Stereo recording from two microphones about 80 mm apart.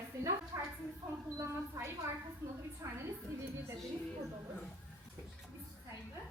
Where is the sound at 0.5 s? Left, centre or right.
Right.